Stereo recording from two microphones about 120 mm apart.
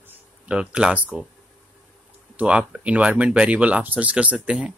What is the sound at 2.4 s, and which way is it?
A man's voice, 10° right (ahead or behind).